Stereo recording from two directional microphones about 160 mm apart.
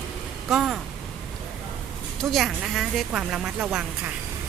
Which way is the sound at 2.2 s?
Centre (ahead or behind).